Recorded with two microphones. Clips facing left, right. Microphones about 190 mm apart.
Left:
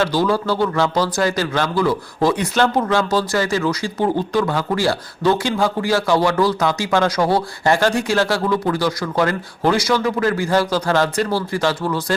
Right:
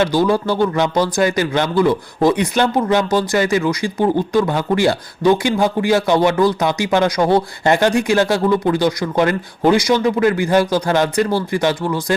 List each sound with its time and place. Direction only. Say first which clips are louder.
0.0 s speech: right 3 dB; 15° right (ahead or behind)